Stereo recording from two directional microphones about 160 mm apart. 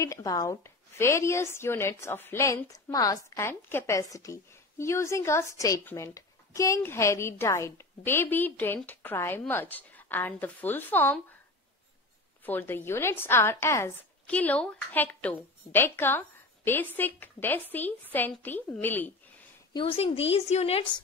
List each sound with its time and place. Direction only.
0.0 s a woman's voice: 20° left (ahead or behind)
12.4 s a woman's voice: 10° left (ahead or behind)
19.7 s a woman's voice: 35° left (ahead or behind)